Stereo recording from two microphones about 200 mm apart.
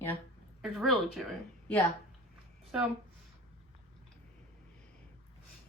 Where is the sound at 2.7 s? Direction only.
5° right (ahead or behind).